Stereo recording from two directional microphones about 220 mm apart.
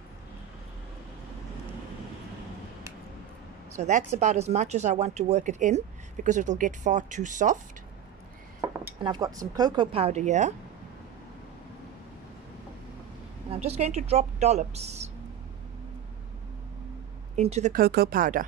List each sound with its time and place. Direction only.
3.7 s speech: 30° right (ahead or behind)
8.5 s speech: 15° right (ahead or behind); by 10.5 s 30° right (ahead or behind)
13.5 s speech: 30° right (ahead or behind)
17.4 s speech: 30° right (ahead or behind)
17.8 s speech: 45° right (ahead or behind)